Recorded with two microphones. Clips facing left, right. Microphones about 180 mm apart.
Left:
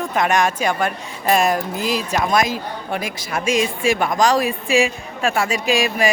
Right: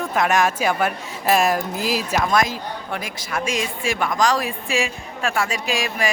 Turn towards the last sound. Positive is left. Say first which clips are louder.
# left 5 dB
turn(degrees=20)  # may be behind; listen again after turning